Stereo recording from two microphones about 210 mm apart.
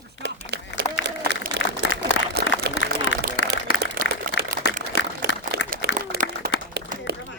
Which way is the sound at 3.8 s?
45° right (ahead or behind).